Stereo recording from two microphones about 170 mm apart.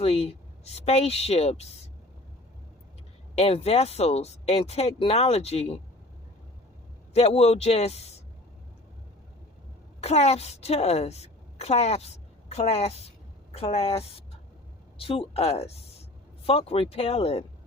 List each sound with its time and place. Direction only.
0.0 s speech: 35° left (ahead or behind)
3.3 s speech: 35° left (ahead or behind)
7.1 s speech: 40° left (ahead or behind)
10.0 s a woman's voice: 40° left (ahead or behind)